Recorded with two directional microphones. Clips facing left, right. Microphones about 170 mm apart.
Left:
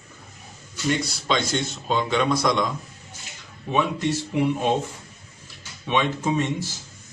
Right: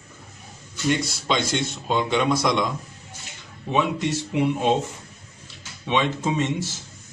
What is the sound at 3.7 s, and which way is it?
Speech, 15° right (ahead or behind).